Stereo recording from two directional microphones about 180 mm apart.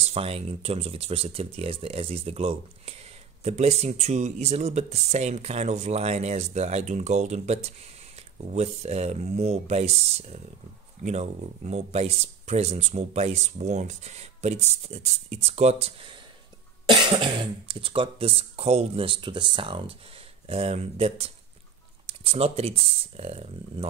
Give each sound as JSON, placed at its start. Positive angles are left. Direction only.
{"t": 0.0, "sound": "speech", "side_deg": -35}